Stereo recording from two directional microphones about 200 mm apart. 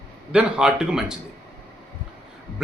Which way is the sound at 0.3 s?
5° right (ahead or behind).